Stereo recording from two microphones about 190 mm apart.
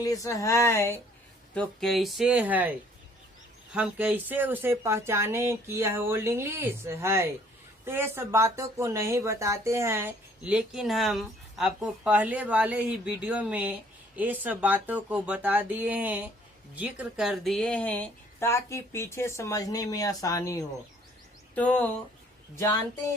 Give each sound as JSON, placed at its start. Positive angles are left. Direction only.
{"t": 0.0, "sound": "speech", "side_deg": 20}
{"t": 1.5, "sound": "speech", "side_deg": 0}
{"t": 21.5, "sound": "speech", "side_deg": 5}